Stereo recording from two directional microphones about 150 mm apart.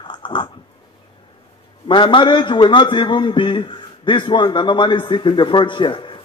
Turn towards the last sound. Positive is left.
turn(degrees=35)  # may be behind; listen again after turning